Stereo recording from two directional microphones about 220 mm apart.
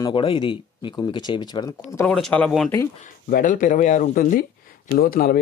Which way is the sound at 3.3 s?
40° left (ahead or behind).